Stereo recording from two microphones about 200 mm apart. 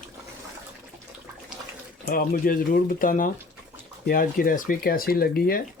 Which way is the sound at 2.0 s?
45° left (ahead or behind).